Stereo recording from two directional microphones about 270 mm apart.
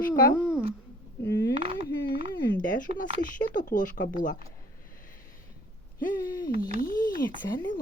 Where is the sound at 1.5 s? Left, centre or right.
Right.